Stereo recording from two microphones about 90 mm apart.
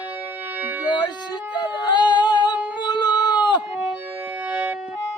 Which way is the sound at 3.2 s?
55° left (ahead or behind).